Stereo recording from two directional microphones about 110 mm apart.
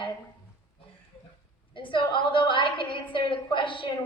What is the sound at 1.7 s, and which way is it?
A woman's voice, 50° left (ahead or behind).